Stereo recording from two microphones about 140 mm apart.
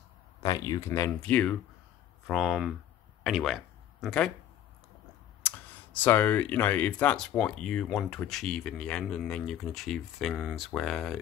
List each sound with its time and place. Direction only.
0.4 s speech: 25° left (ahead or behind)
1.2 s speech: 10° left (ahead or behind)
2.2 s speech: 5° right (ahead or behind)
5.4 s clicking: 15° left (ahead or behind)
5.9 s speech: 10° left (ahead or behind)